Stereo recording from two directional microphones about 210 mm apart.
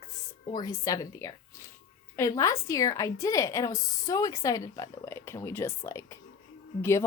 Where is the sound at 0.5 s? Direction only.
20° left (ahead or behind).